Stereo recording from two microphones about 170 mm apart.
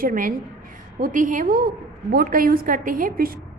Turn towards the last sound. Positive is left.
turn(degrees=-55)  # may be behind; listen again after turning